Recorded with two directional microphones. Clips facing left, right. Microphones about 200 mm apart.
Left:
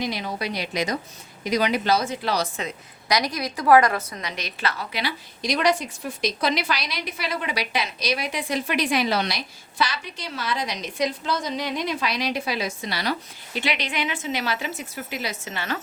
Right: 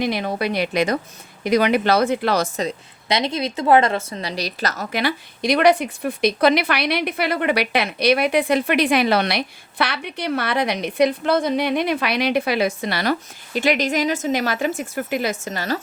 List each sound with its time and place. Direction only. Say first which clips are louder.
0.0 s a woman's voice: right 6 dB; 60° right (ahead or behind); by 15.8 s 40° right (ahead or behind)